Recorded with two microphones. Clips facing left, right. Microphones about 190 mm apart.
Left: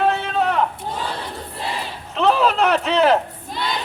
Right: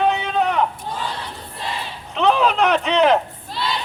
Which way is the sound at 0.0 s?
Centre (ahead or behind).